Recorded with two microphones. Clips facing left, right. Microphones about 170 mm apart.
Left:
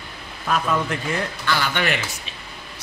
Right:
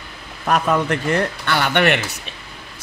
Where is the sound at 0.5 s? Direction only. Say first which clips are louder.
Right 4 dB; 60° right (ahead or behind).